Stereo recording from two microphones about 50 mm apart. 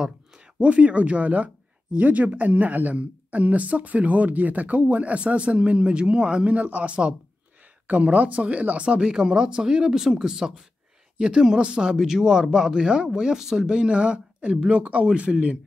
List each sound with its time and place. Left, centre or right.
0.6 s speech: right
6.5 s speech: right